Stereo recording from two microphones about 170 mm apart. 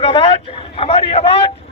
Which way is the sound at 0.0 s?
30° left (ahead or behind).